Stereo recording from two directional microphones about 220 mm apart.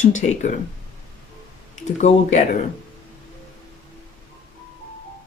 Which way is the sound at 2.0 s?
30° left (ahead or behind).